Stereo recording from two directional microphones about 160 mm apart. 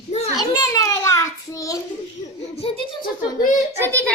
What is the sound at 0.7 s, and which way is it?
Child singing, 20° left (ahead or behind).